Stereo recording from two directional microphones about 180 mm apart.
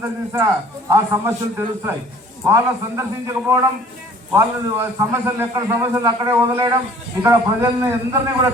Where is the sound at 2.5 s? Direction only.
15° right (ahead or behind).